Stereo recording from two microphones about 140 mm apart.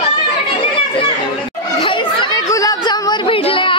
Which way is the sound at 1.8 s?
35° left (ahead or behind).